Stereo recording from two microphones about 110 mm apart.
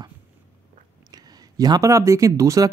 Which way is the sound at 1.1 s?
35° right (ahead or behind).